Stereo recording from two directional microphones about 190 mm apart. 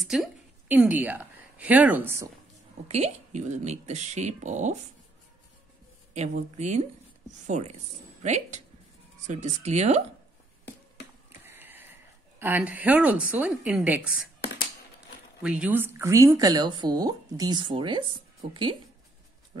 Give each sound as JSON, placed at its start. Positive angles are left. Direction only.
{"t": 0.0, "sound": "a woman's voice", "side_deg": 0}
{"t": 2.9, "sound": "speech", "side_deg": -35}
{"t": 6.1, "sound": "speech", "side_deg": -35}
{"t": 11.4, "sound": "speech", "side_deg": -10}
{"t": 15.4, "sound": "speech", "side_deg": -5}